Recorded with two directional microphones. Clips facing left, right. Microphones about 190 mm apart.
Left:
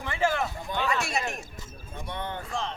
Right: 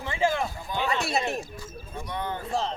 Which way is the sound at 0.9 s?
35° right (ahead or behind).